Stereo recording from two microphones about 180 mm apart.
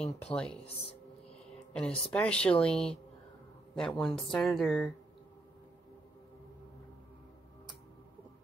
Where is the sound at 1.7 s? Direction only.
5° left (ahead or behind).